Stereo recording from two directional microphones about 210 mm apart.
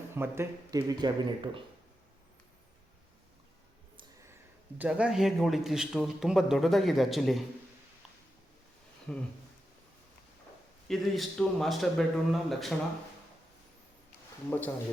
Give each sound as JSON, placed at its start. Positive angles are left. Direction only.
{"t": 0.1, "sound": "speech", "side_deg": -10}
{"t": 4.8, "sound": "speech", "side_deg": -5}
{"t": 9.1, "sound": "speech", "side_deg": 5}
{"t": 10.8, "sound": "speech", "side_deg": 0}